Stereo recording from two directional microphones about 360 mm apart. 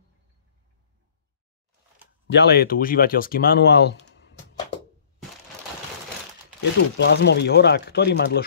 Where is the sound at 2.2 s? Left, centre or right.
Left.